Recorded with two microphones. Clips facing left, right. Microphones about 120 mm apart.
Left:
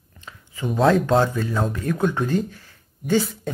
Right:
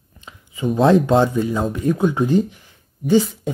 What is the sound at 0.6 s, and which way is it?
Speech, centre (ahead or behind).